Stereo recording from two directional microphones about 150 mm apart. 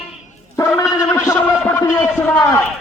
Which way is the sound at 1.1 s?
15° left (ahead or behind).